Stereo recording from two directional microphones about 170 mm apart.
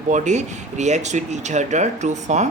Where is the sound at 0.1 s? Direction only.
45° right (ahead or behind).